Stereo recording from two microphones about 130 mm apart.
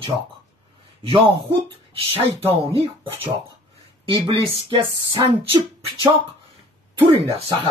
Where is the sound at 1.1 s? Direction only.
40° right (ahead or behind).